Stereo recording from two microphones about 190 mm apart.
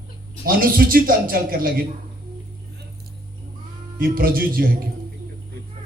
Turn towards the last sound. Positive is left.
turn(degrees=-50)  # may be behind; listen again after turning